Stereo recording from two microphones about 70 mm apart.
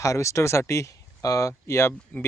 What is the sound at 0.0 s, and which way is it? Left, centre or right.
Speech, left.